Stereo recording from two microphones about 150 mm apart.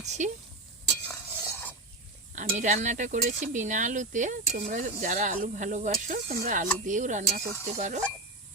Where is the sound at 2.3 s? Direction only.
55° right (ahead or behind).